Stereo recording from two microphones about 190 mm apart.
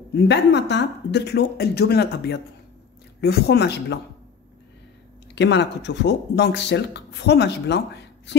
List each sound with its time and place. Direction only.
0.1 s speech: 65° left (ahead or behind)
5.3 s speech: 65° left (ahead or behind)